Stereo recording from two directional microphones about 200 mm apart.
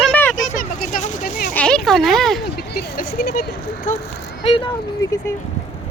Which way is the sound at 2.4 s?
50° left (ahead or behind).